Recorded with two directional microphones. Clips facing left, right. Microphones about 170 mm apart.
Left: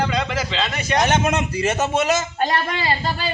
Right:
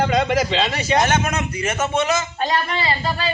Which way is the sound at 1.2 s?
30° left (ahead or behind).